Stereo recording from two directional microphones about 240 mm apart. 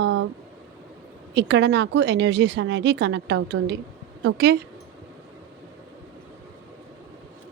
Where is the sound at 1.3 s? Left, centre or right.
Right.